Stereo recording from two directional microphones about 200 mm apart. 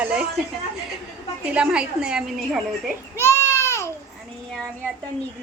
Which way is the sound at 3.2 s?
15° left (ahead or behind).